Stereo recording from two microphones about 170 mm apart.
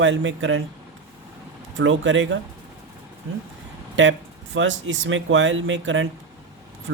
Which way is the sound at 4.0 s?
90° right.